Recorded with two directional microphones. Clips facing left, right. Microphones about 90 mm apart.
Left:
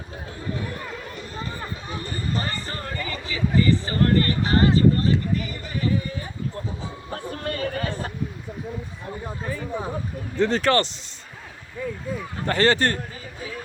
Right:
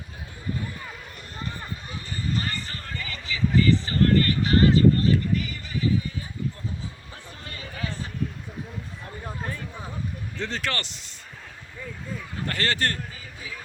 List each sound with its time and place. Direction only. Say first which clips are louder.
0.5 s basketball bounce: left 2 dB; 75° left (ahead or behind)
2.0 s a sound: even; 40° left (ahead or behind)
9.2 s a sound: left 2 dB; 5° left (ahead or behind)
10.3 s speech: left 11 dB; 45° left (ahead or behind)
11.8 s speech: left 7 dB; 5° left (ahead or behind)
12.5 s speech: left 7 dB; 30° left (ahead or behind)